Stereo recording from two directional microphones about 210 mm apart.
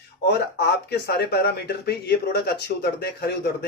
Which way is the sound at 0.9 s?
50° left (ahead or behind).